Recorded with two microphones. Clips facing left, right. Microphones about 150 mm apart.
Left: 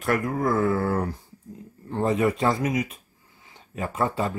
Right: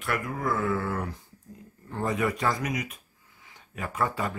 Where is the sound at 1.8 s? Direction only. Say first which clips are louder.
Left 5 dB; 25° left (ahead or behind).